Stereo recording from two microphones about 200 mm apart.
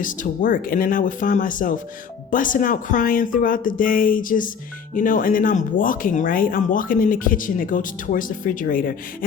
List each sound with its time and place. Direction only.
0.0 s speech: 40° left (ahead or behind)